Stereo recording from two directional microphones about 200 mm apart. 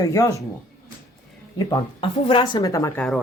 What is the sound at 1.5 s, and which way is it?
Speech, 20° left (ahead or behind).